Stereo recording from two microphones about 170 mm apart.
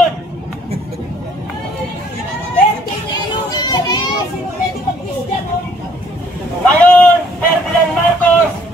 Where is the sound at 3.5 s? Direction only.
25° left (ahead or behind).